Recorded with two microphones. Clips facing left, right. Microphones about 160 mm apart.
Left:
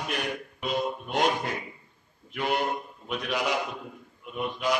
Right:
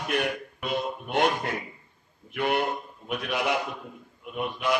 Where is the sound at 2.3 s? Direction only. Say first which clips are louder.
Right 2 dB; 55° right (ahead or behind).